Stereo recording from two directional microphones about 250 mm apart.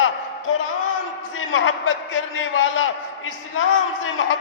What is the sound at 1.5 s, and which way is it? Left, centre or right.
A man's voice, left.